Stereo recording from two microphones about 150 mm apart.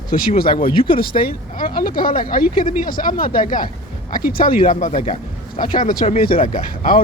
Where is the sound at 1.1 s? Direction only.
45° left (ahead or behind).